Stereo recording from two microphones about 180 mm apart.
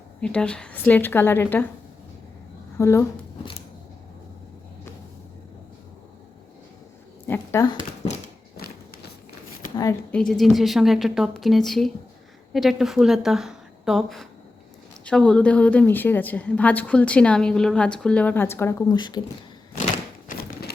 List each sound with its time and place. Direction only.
0.2 s a woman's voice: 5° left (ahead or behind)
2.7 s speech: 15° left (ahead or behind)
7.3 s a woman's voice: 15° left (ahead or behind)
10.1 s a woman's voice: 5° left (ahead or behind); by 19.2 s 25° left (ahead or behind)
19.7 s a sound: 45° left (ahead or behind)